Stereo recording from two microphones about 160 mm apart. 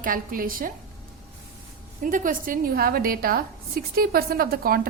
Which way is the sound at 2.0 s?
55° right (ahead or behind).